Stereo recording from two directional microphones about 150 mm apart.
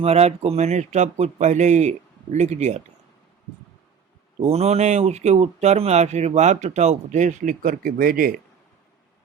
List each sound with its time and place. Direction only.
0.0 s speech: 45° right (ahead or behind)
4.4 s speech: 45° right (ahead or behind); by 8.3 s 70° right (ahead or behind)